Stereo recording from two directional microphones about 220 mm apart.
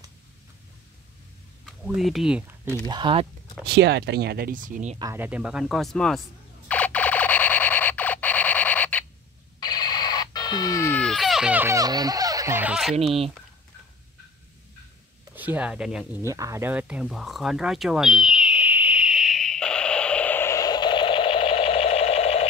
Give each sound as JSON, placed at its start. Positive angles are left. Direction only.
{"t": 1.7, "sound": "speech", "side_deg": 0}
{"t": 3.6, "sound": "speech", "side_deg": -50}
{"t": 4.9, "sound": "speech", "side_deg": -15}
{"t": 6.7, "sound": "alarm", "side_deg": 5}
{"t": 9.6, "sound": "a sound", "side_deg": 20}
{"t": 12.9, "sound": "speech", "side_deg": -30}
{"t": 15.3, "sound": "a sound", "side_deg": -10}